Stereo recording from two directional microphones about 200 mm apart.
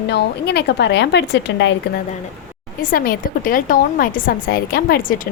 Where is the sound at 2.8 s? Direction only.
45° left (ahead or behind).